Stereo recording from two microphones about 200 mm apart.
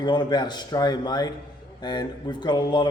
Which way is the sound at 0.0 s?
20° left (ahead or behind).